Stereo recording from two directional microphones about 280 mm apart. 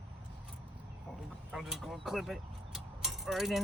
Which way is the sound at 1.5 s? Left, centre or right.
Centre.